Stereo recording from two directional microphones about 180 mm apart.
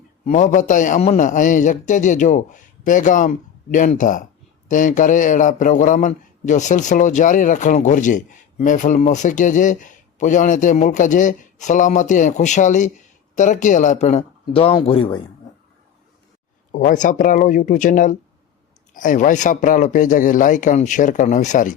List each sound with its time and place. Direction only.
0.3 s a man's voice: 40° left (ahead or behind)
16.7 s a man's voice: 45° left (ahead or behind)